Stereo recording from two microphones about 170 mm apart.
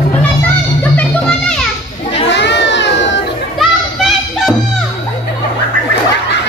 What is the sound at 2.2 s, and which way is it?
Children playing, 90° left.